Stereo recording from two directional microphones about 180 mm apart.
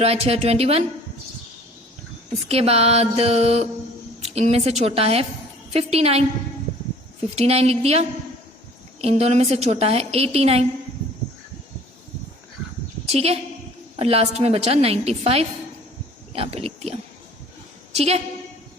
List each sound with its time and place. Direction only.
0.0 s a woman's voice: 35° right (ahead or behind)
2.5 s a woman's voice: 35° right (ahead or behind)
7.3 s a woman's voice: 35° right (ahead or behind)
13.1 s a woman's voice: 35° right (ahead or behind)